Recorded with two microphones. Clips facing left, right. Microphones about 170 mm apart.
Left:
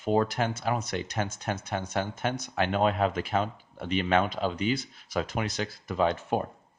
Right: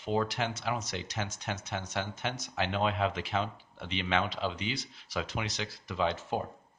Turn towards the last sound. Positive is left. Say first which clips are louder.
# left 5 dB
turn(degrees=50)  # may be behind; listen again after turning